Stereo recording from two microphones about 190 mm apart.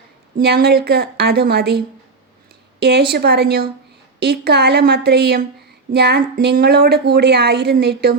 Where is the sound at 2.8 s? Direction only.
55° right (ahead or behind).